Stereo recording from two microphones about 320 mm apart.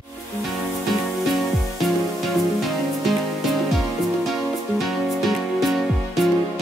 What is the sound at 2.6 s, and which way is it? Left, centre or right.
Music, centre.